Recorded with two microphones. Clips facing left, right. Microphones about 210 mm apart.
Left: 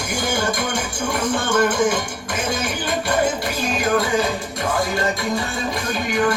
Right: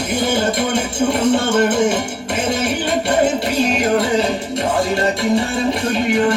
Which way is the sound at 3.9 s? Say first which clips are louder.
Right 1 dB; 25° right (ahead or behind).